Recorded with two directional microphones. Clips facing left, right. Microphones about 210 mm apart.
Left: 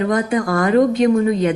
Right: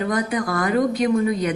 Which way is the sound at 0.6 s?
25° left (ahead or behind).